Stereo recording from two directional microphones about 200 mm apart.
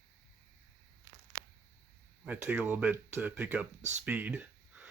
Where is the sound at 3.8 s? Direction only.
35° right (ahead or behind).